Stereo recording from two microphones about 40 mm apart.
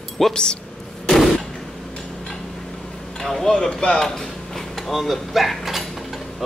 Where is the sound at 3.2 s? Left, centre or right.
Centre.